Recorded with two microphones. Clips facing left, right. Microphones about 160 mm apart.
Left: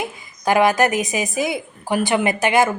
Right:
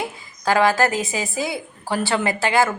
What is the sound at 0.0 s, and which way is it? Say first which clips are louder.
Speech: left 2 dB; 20° left (ahead or behind).